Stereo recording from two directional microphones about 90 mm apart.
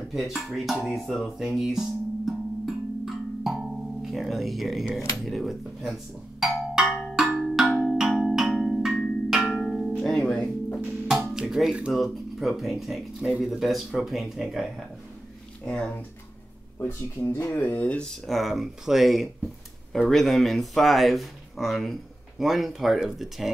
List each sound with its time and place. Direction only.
0.1 s music: centre (ahead or behind)
6.4 s wood block: 5° right (ahead or behind)
6.9 s tubular bells: 10° left (ahead or behind)
7.2 s tubular bells: centre (ahead or behind)
9.6 s music: 5° left (ahead or behind)
10.2 s speech: 15° left (ahead or behind)
11.2 s speech: 5° right (ahead or behind)
15.6 s speech: 10° left (ahead or behind)
16.7 s speech: 30° left (ahead or behind)
18.0 s speech: 5° left (ahead or behind)